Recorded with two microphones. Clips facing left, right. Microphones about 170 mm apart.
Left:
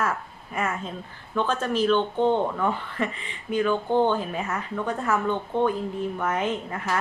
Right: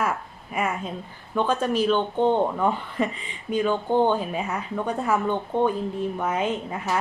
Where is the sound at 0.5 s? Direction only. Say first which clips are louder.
Right 2 dB; 10° right (ahead or behind).